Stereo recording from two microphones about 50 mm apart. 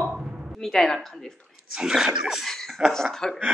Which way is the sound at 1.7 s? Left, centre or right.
Centre.